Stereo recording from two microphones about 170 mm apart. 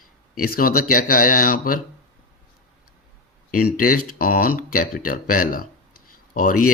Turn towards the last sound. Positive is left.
turn(degrees=55)  # may be behind; listen again after turning